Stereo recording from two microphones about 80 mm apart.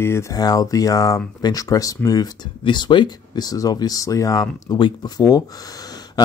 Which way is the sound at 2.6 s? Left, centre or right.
Left.